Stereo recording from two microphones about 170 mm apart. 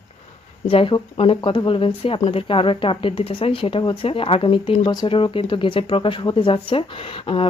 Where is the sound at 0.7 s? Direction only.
30° left (ahead or behind).